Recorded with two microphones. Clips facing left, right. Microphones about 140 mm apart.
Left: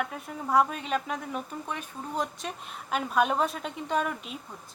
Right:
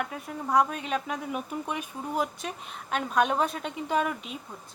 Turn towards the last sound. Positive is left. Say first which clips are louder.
# right 1 dB
turn(degrees=0)  # may be behind; listen again after turning